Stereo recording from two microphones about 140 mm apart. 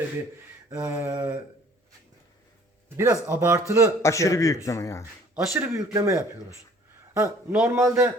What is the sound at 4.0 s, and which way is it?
Speech, 20° left (ahead or behind).